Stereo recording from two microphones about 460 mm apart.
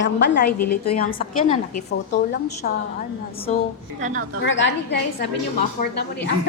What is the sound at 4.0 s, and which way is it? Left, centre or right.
Speech, centre.